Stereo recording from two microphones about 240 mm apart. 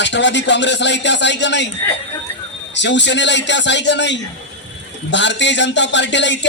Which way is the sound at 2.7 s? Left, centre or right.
Left.